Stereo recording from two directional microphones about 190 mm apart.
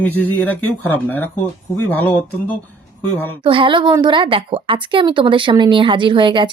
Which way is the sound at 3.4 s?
25° right (ahead or behind).